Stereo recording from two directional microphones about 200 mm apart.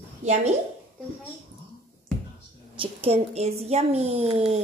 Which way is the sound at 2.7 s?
30° right (ahead or behind).